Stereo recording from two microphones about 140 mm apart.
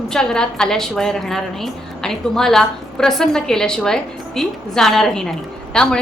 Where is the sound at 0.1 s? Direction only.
5° left (ahead or behind).